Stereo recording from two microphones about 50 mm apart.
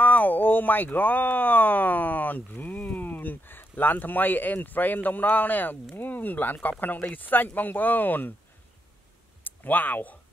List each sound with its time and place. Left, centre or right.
0.0 s speech: left
9.4 s speech: left